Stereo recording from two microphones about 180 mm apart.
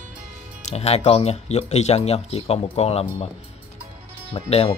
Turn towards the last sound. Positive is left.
turn(degrees=35)  # may be behind; listen again after turning